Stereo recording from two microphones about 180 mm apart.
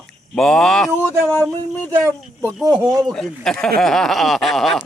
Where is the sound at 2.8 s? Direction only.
20° right (ahead or behind).